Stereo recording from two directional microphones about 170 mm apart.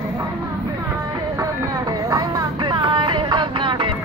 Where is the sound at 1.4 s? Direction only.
20° right (ahead or behind).